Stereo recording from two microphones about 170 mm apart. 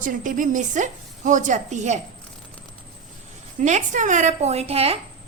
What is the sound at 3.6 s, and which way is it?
A woman's voice, 45° right (ahead or behind).